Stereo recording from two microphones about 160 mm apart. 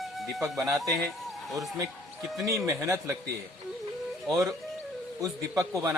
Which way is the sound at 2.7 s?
20° right (ahead or behind).